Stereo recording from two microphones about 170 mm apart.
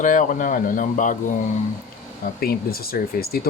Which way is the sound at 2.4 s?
65° left (ahead or behind).